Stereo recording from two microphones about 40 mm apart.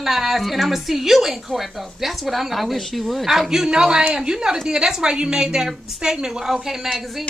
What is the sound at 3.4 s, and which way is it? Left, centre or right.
A woman's voice, centre.